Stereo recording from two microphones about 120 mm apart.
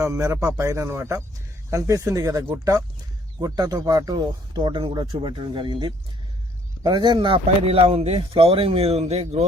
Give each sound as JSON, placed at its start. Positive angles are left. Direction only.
{"t": 0.0, "sound": "speech", "side_deg": -25}
{"t": 3.4, "sound": "speech", "side_deg": -30}